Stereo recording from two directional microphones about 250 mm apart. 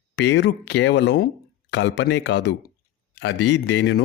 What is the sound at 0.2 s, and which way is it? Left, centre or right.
Speech, left.